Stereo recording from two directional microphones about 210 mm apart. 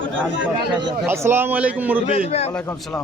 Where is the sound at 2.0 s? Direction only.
30° left (ahead or behind).